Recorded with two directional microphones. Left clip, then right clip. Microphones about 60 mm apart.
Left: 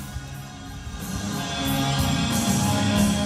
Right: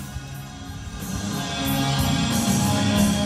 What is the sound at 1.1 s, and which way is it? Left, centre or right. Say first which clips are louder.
Music: right 1 dB; right.